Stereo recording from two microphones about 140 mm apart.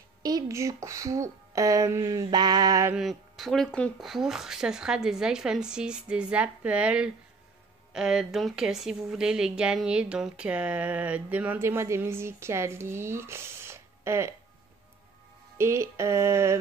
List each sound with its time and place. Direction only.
0.2 s speech: 30° right (ahead or behind)
2.9 s speech: centre (ahead or behind); by 14.3 s 20° right (ahead or behind)
15.5 s speech: 20° right (ahead or behind)